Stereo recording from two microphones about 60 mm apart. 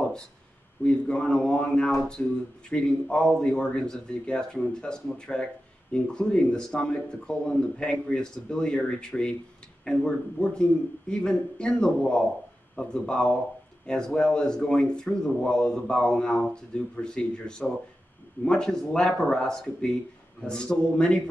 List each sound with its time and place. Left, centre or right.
0.8 s speech: centre